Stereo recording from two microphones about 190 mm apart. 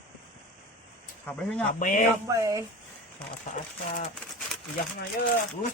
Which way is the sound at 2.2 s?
15° right (ahead or behind).